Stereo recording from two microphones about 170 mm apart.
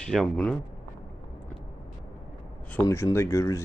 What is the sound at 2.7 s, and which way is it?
Speech, 15° left (ahead or behind).